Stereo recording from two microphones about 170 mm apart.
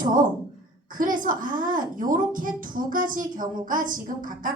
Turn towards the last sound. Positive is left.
turn(degrees=-55)  # may be behind; listen again after turning